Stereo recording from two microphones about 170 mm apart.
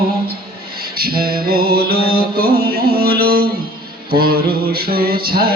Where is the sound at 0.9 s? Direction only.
60° right (ahead or behind).